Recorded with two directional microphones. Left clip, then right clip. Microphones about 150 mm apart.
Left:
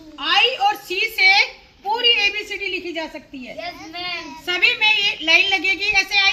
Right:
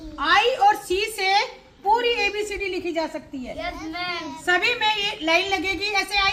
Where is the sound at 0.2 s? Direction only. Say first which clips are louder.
Left 1 dB; 10° right (ahead or behind).